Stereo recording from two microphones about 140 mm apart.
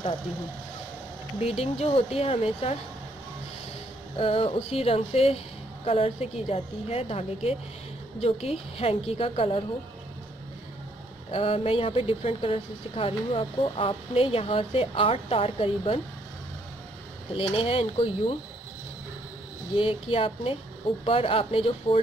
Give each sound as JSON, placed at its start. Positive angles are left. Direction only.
{"t": 1.4, "sound": "speech", "side_deg": 45}
{"t": 4.2, "sound": "speech", "side_deg": 40}
{"t": 11.2, "sound": "speech", "side_deg": 40}
{"t": 17.3, "sound": "speech", "side_deg": 40}
{"t": 19.7, "sound": "speech", "side_deg": 40}